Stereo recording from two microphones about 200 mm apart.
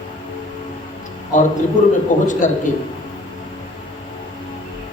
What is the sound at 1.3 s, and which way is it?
Mantra, 40° left (ahead or behind).